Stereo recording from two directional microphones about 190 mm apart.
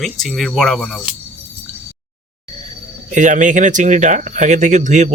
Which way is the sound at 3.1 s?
40° right (ahead or behind).